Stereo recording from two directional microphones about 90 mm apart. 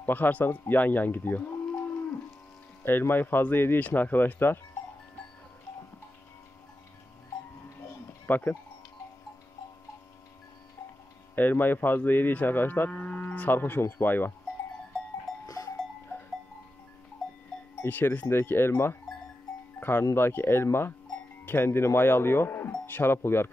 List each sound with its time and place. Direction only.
0.0 s speech: 20° left (ahead or behind)
8.3 s speech: 20° left (ahead or behind)
11.3 s speech: 20° left (ahead or behind)
15.4 s livestock: 40° left (ahead or behind)
17.8 s speech: 20° left (ahead or behind)